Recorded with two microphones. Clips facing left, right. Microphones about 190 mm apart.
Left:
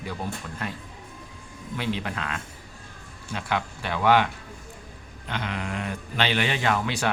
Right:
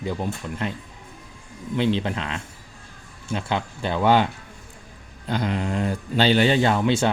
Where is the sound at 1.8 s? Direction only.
25° right (ahead or behind).